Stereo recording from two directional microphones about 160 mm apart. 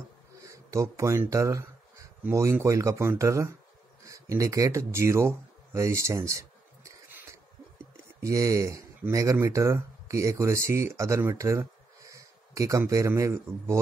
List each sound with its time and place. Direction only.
0.4 s speech: 20° right (ahead or behind)
4.0 s a sound: 20° right (ahead or behind)
8.2 s speech: 20° right (ahead or behind)